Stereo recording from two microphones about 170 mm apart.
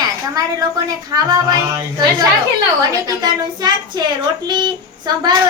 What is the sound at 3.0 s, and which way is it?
Speech, 25° right (ahead or behind).